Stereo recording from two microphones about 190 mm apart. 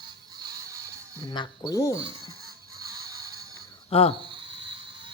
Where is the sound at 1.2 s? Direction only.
25° left (ahead or behind).